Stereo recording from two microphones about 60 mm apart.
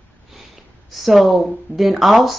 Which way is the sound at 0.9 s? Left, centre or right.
Centre.